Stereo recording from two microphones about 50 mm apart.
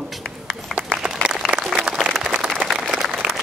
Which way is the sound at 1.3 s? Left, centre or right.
Centre.